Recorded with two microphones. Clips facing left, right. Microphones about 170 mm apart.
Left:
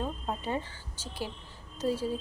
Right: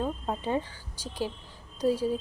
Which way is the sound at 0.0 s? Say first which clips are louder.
Right 3 dB; 15° right (ahead or behind).